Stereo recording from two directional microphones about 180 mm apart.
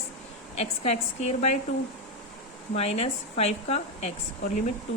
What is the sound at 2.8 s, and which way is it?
Speech, 35° left (ahead or behind).